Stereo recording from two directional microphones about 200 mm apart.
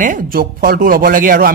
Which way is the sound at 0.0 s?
45° right (ahead or behind).